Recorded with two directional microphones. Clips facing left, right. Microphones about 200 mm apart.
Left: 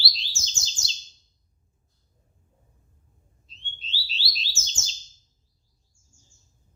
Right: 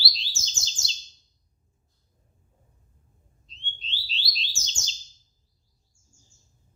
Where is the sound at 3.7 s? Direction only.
5° left (ahead or behind).